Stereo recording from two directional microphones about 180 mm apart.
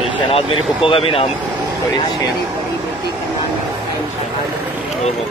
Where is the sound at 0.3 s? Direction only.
30° left (ahead or behind).